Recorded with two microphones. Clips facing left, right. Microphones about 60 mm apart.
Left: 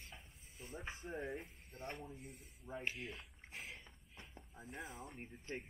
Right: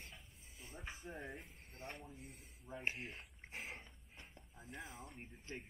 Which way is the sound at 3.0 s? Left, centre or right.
Right.